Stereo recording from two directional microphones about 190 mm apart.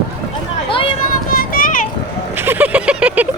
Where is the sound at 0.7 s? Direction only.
25° left (ahead or behind).